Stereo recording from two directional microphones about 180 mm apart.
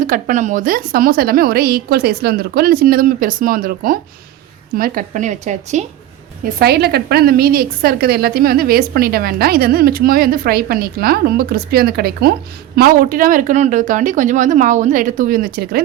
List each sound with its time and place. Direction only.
0.0 s a woman's voice: 45° right (ahead or behind)
6.4 s a woman's voice: 60° right (ahead or behind)